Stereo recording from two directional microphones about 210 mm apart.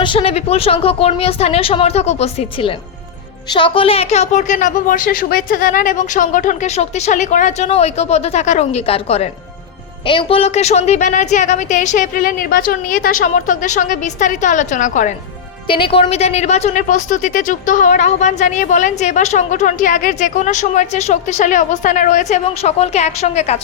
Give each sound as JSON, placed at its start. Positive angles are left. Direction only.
{"t": 0.0, "sound": "speech", "side_deg": 25}
{"t": 15.6, "sound": "speech", "side_deg": 25}